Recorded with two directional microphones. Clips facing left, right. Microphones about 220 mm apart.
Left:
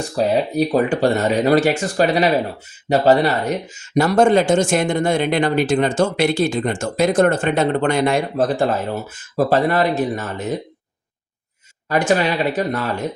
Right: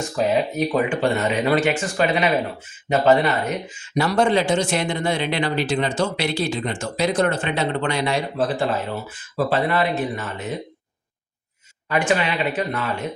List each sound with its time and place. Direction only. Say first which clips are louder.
0.2 s speech: left 3 dB; 35° left (ahead or behind)
3.9 s speech: left 5 dB; 45° left (ahead or behind)
11.9 s speech: left 4 dB; 40° left (ahead or behind)